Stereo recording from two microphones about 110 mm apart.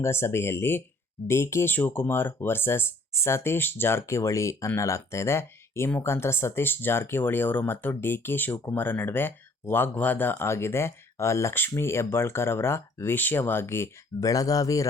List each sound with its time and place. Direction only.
0.0 s speech: 25° left (ahead or behind)